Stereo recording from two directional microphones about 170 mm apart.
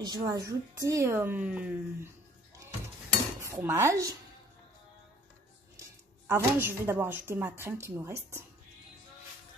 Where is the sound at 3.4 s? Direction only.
15° right (ahead or behind).